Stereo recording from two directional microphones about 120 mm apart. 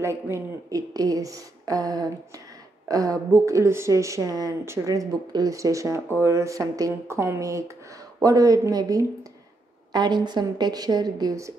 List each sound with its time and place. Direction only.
0.0 s a woman's voice: 25° right (ahead or behind)